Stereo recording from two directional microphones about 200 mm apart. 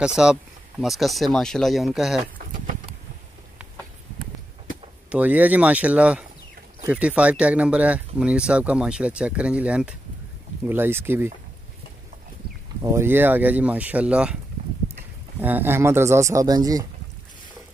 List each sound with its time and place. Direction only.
0.0 s speech: 5° right (ahead or behind)
5.1 s speech: 10° right (ahead or behind)
12.9 s speech: 10° right (ahead or behind)
15.4 s speech: 10° right (ahead or behind)